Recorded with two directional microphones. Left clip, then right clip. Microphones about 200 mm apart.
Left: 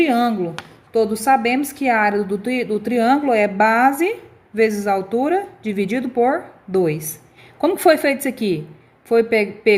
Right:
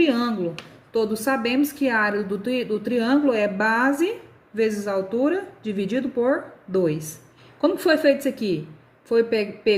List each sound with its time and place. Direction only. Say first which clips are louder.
0.0 s speech: left 4 dB; 35° left (ahead or behind)